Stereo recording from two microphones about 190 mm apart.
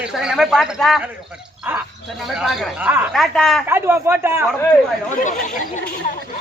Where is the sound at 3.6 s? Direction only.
10° right (ahead or behind).